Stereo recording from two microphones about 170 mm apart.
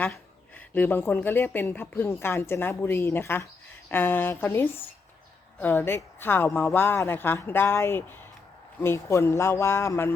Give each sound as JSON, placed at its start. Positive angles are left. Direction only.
{"t": 0.0, "sound": "a woman's voice", "side_deg": 10}